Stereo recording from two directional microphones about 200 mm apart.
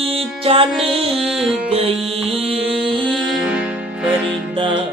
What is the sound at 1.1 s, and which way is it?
Music, centre (ahead or behind).